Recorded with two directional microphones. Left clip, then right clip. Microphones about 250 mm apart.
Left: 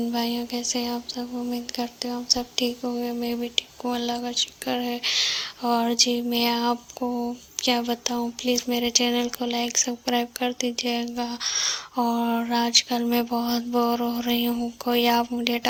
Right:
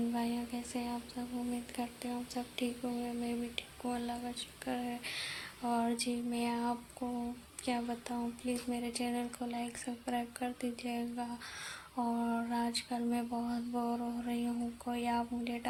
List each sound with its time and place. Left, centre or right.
0.1 s a woman's voice: left